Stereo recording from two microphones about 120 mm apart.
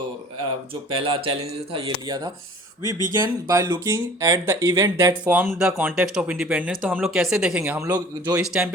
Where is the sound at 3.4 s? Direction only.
25° right (ahead or behind).